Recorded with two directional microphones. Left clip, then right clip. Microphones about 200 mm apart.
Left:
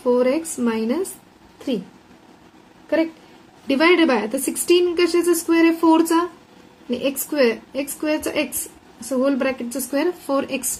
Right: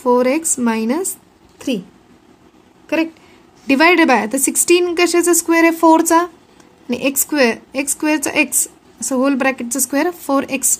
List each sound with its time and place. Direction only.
0.0 s a woman's voice: 55° right (ahead or behind)
3.6 s a woman's voice: 55° right (ahead or behind)